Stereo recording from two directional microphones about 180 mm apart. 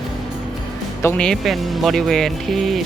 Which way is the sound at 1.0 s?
10° left (ahead or behind).